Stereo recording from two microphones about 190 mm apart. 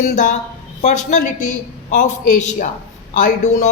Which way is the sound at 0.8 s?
40° left (ahead or behind).